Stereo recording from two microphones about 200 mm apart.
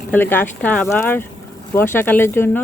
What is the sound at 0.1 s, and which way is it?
A woman's voice, 10° left (ahead or behind).